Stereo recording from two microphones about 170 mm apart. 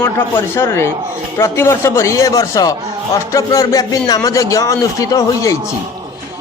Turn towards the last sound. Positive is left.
turn(degrees=20)  # may be behind; listen again after turning